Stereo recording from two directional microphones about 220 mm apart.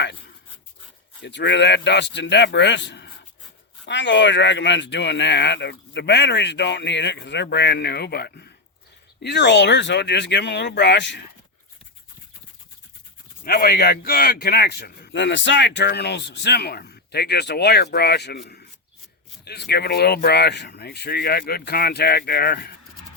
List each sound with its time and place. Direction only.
1.2 s speech: 55° left (ahead or behind)
13.4 s speech: 40° left (ahead or behind)